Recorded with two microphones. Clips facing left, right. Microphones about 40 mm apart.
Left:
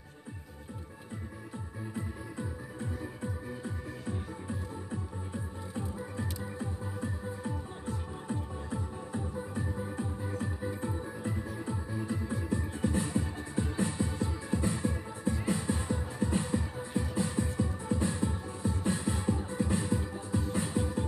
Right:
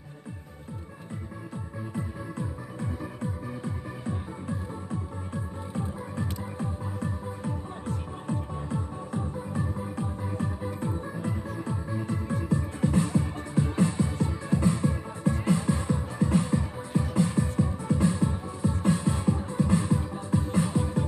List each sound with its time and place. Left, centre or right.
6.1 s music: right
10.3 s music: right
11.1 s music: right